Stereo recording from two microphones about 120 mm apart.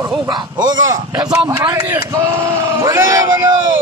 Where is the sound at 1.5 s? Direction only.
25° right (ahead or behind).